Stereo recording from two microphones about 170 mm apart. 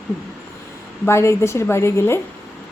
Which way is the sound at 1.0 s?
15° left (ahead or behind).